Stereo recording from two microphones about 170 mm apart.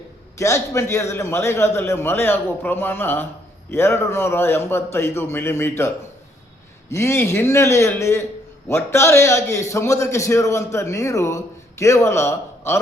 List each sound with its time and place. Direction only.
0.3 s a man's voice: 15° left (ahead or behind)
6.9 s a man's voice: 15° left (ahead or behind)